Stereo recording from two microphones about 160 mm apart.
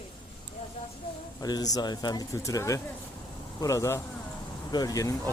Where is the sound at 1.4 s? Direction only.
25° left (ahead or behind).